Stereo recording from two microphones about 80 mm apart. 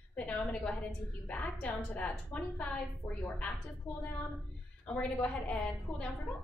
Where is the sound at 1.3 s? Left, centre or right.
Centre.